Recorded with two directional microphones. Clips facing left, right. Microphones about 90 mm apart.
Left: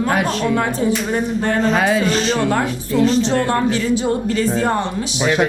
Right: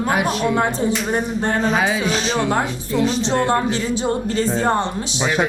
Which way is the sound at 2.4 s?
20° right (ahead or behind).